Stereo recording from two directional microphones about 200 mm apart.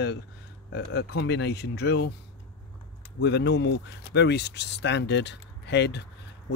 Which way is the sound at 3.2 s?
60° left (ahead or behind).